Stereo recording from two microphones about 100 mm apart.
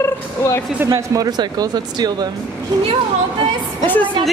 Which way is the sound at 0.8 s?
30° right (ahead or behind).